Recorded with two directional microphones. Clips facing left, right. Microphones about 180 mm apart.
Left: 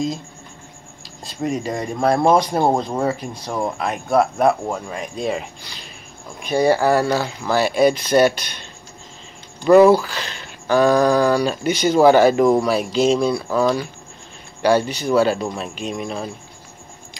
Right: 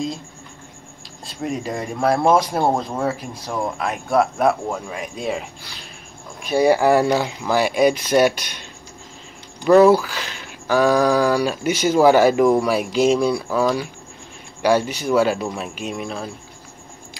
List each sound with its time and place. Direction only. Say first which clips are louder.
1.2 s speech: left 3 dB; centre (ahead or behind)
9.7 s speech: left 1 dB; 10° left (ahead or behind)
10.0 s speech: left 1 dB; 10° right (ahead or behind)